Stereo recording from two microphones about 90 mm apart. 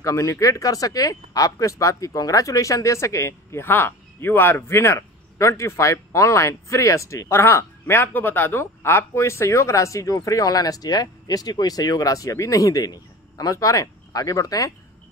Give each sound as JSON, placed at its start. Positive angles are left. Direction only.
{"t": 0.0, "sound": "speech", "side_deg": 35}